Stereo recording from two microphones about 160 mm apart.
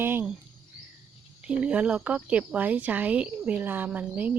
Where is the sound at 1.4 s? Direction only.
5° right (ahead or behind).